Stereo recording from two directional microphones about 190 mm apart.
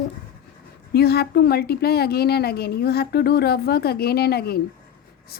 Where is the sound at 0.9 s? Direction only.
55° left (ahead or behind).